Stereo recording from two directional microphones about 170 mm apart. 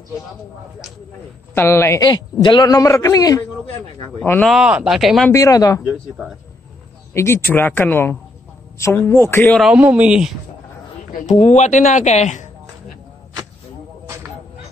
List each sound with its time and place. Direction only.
1.5 s a man's voice: 15° left (ahead or behind)
4.2 s speech: 5° left (ahead or behind)
5.3 s a man's voice: 20° left (ahead or behind)
7.2 s speech: 15° left (ahead or behind)
9.6 s speech: 5° right (ahead or behind)
11.2 s speech: 40° left (ahead or behind)